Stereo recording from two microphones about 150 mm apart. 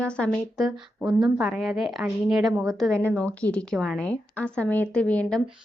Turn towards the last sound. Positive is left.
turn(degrees=5)  # may be behind; listen again after turning